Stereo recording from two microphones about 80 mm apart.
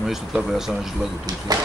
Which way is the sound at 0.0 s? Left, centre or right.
Centre.